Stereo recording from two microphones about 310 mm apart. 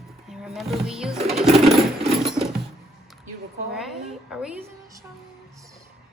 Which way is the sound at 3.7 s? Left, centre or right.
Centre.